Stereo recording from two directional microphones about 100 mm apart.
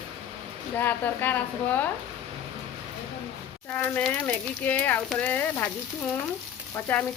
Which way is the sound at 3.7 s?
15° left (ahead or behind).